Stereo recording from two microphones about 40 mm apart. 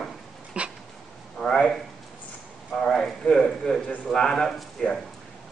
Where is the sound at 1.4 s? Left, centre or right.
Centre.